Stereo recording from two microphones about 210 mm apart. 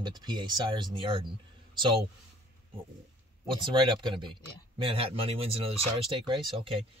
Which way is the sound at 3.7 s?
25° right (ahead or behind).